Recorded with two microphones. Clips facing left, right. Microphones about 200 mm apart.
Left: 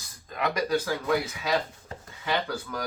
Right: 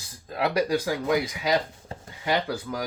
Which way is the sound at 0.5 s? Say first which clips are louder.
Right 2 dB; 10° right (ahead or behind).